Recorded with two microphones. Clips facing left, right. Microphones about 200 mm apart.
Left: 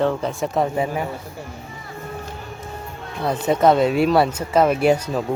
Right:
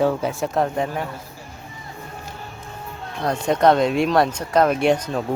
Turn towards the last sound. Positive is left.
turn(degrees=5)  # may be behind; listen again after turning